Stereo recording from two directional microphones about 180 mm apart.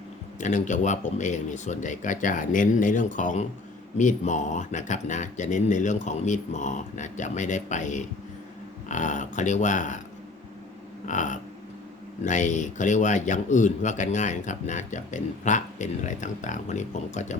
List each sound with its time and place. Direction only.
0.3 s speech: 40° left (ahead or behind)
11.0 s a sound: 45° left (ahead or behind)
12.2 s speech: 45° left (ahead or behind)